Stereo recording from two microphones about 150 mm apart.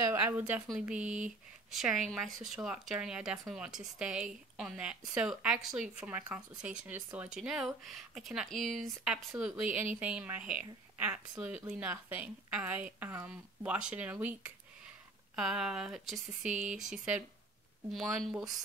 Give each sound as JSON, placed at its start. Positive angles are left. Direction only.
{"t": 0.1, "sound": "a woman's voice", "side_deg": -10}
{"t": 0.9, "sound": "speech", "side_deg": -55}
{"t": 1.7, "sound": "speech", "side_deg": 0}
{"t": 16.4, "sound": "speech", "side_deg": -55}
{"t": 16.7, "sound": "speech", "side_deg": -5}